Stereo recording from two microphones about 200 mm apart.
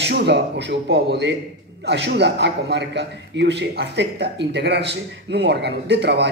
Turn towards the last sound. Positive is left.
turn(degrees=-60)  # may be behind; listen again after turning